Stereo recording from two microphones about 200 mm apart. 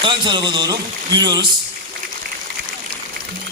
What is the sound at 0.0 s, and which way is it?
A man's voice, 25° right (ahead or behind).